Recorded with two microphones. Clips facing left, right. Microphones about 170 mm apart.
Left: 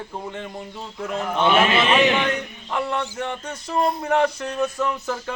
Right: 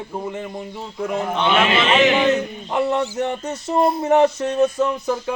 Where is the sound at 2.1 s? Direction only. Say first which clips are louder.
Right 6 dB; 25° right (ahead or behind).